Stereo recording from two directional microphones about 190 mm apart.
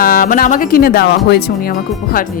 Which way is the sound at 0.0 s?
45° left (ahead or behind).